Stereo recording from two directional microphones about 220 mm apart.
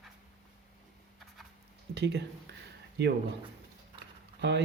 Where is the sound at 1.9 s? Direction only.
50° right (ahead or behind).